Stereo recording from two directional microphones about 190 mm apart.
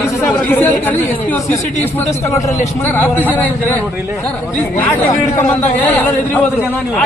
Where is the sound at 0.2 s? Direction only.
10° left (ahead or behind).